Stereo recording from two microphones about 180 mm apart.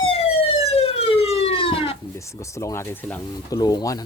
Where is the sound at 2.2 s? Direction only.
15° left (ahead or behind).